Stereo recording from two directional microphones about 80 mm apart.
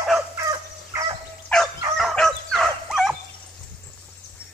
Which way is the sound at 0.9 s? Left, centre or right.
Right.